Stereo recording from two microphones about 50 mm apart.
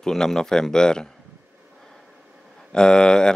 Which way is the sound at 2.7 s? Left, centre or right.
Centre.